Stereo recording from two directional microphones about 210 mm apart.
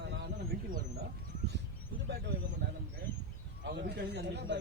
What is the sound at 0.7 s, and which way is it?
Speech, 40° right (ahead or behind).